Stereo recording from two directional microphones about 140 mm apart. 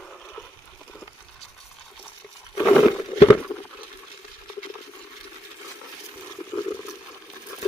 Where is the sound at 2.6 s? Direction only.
Centre (ahead or behind).